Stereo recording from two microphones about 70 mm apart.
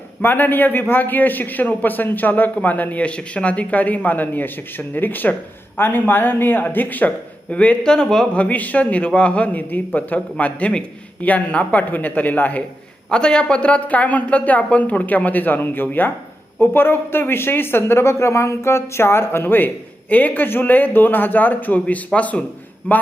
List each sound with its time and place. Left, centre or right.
0.2 s a man's voice: left; by 8.4 s centre
8.4 s a man's voice: left
13.1 s a man's voice: centre